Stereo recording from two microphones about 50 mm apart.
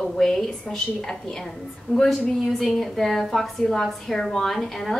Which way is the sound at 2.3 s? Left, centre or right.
Centre.